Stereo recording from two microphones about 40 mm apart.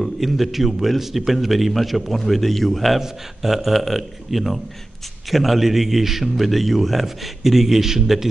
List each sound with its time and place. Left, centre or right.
0.0 s a man's voice: centre
3.0 s a man's voice: centre